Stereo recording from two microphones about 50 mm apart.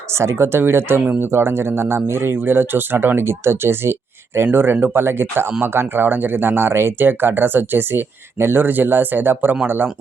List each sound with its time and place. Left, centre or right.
0.1 s speech: right